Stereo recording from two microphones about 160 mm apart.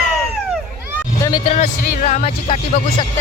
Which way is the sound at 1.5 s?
45° left (ahead or behind).